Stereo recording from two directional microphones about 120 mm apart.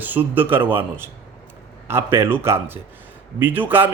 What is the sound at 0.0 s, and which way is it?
A man's voice, 15° right (ahead or behind).